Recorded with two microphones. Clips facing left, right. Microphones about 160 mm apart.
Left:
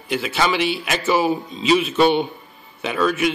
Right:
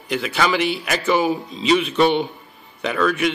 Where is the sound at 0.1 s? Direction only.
Centre (ahead or behind).